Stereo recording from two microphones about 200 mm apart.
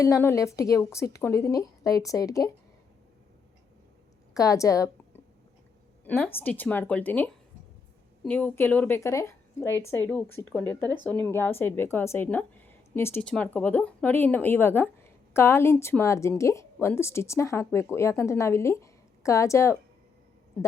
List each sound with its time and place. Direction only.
0.0 s a woman's voice: 15° left (ahead or behind)
4.4 s a woman's voice: 15° left (ahead or behind)
10.8 s speech: 20° right (ahead or behind)
11.1 s a woman's voice: 10° left (ahead or behind)